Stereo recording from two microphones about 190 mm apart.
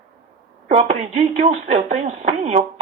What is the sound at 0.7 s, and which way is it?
Speech, 35° right (ahead or behind).